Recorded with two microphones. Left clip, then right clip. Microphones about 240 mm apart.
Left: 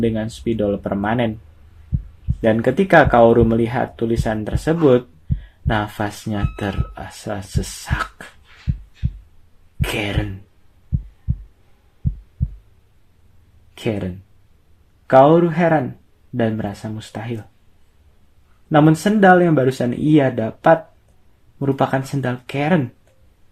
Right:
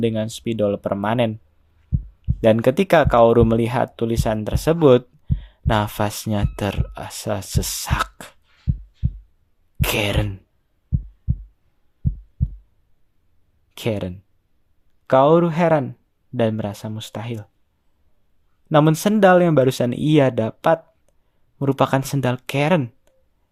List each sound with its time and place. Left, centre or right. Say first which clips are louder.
0.0 s speech: left 1 dB; right
2.4 s speech: right 1 dB; right
9.8 s speech: right 2 dB; right
10.9 s heart sounds: even; centre
13.7 s speech: left 1 dB; right
18.7 s speech: left 2 dB; right